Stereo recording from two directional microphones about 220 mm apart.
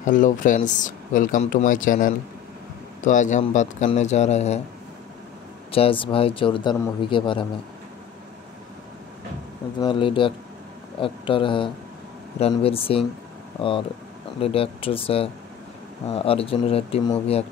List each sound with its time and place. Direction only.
0.0 s speech: 35° left (ahead or behind)
5.7 s speech: 25° left (ahead or behind)
9.8 s speech: 25° left (ahead or behind)